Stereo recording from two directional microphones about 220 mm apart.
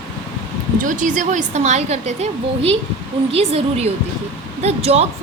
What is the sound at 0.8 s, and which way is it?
A woman's voice, 35° right (ahead or behind).